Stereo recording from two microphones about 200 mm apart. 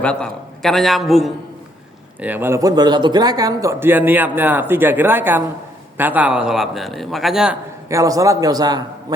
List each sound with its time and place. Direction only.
0.0 s a man's voice: 5° left (ahead or behind)
7.9 s speech: 15° right (ahead or behind)